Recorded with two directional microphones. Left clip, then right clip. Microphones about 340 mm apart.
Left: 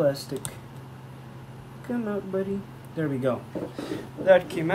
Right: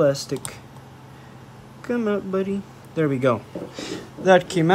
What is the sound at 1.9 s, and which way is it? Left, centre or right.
Speech, centre.